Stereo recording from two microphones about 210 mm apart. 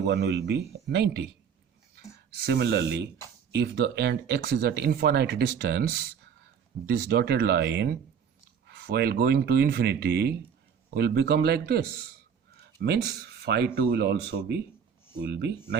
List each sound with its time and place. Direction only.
0.0 s speech: 55° right (ahead or behind)
2.3 s speech: 50° right (ahead or behind)